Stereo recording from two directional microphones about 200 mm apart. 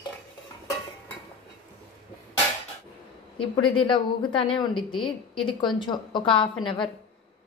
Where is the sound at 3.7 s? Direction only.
25° left (ahead or behind).